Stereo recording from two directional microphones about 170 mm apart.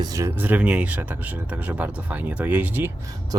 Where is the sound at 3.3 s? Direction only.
25° right (ahead or behind).